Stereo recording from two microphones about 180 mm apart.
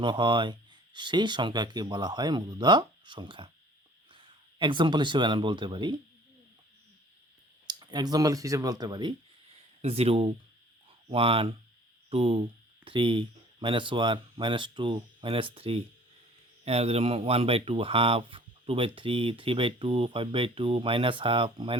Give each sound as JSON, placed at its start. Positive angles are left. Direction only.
{"t": 0.0, "sound": "speech", "side_deg": -25}
{"t": 7.7, "sound": "speech", "side_deg": -25}